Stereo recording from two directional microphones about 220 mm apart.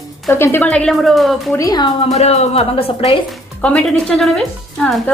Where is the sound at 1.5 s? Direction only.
15° left (ahead or behind).